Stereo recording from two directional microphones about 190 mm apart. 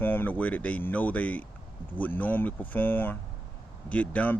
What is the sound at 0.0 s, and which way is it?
Speech, 10° left (ahead or behind).